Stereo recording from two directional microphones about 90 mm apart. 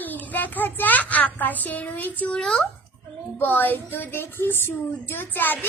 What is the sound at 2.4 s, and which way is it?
Speech, 5° left (ahead or behind).